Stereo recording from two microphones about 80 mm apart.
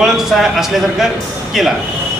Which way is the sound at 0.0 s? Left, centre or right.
Centre.